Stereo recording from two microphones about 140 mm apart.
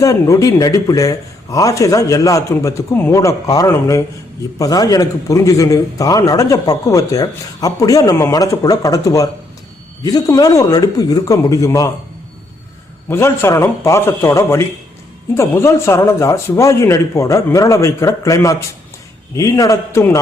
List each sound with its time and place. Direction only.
0.0 s a man's voice: 25° left (ahead or behind)
13.1 s a man's voice: 20° left (ahead or behind)